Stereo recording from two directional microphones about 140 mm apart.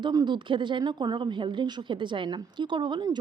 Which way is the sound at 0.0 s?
30° right (ahead or behind).